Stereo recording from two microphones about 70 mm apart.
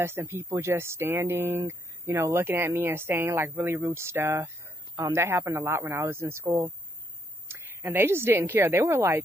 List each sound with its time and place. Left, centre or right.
0.0 s a woman's voice: right